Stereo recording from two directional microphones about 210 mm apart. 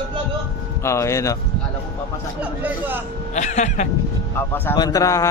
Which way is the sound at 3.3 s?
35° left (ahead or behind).